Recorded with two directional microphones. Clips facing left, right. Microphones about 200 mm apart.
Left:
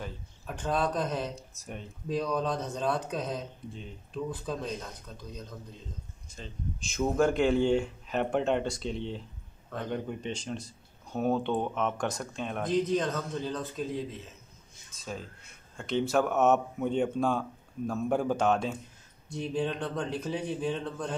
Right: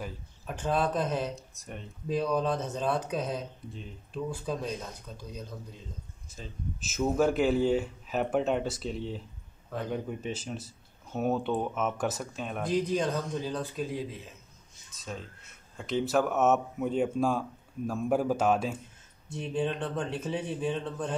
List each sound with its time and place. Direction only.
0.0 s speech: 5° right (ahead or behind)
6.3 s speech: 5° right (ahead or behind)